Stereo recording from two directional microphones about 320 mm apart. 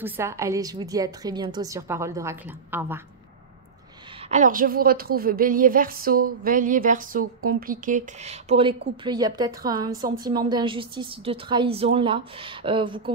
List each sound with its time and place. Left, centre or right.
0.0 s a woman's voice: centre
4.3 s a woman's voice: right